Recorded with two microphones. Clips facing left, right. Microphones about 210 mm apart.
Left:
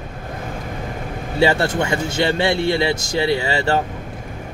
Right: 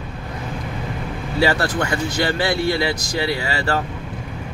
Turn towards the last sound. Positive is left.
turn(degrees=25)  # may be behind; listen again after turning